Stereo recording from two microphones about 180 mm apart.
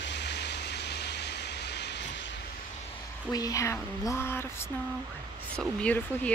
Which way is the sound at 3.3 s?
20° left (ahead or behind).